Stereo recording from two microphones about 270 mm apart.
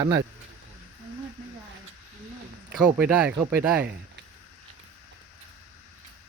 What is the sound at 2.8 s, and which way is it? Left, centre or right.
Speech, centre.